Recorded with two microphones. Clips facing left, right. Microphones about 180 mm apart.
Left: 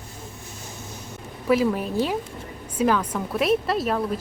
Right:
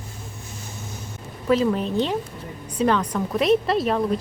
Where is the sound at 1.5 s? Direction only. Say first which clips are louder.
Right 1 dB; 10° left (ahead or behind).